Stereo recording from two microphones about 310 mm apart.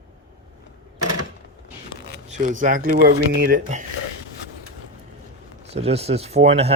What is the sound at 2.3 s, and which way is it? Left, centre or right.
Speech, right.